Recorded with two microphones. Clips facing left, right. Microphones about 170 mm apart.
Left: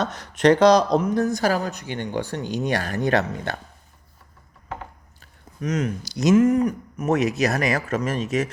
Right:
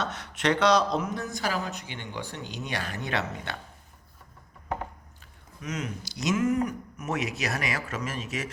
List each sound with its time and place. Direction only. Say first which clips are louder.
0.0 s speech: left 9 dB; 40° left (ahead or behind)
5.5 s speech: left 9 dB; 45° left (ahead or behind)